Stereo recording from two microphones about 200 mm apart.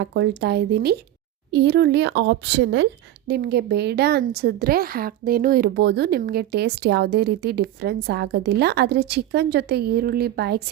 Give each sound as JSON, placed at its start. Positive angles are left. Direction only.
{"t": 0.0, "sound": "speech", "side_deg": -60}